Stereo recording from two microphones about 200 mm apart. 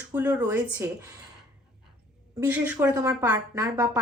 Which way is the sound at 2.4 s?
10° right (ahead or behind).